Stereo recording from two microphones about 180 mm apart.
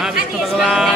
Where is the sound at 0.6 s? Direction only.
Centre (ahead or behind).